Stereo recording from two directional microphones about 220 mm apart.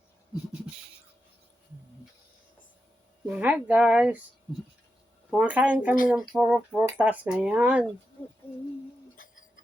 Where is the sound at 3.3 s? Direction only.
5° right (ahead or behind).